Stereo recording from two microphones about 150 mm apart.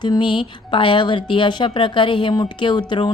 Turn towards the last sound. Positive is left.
turn(degrees=30)  # may be behind; listen again after turning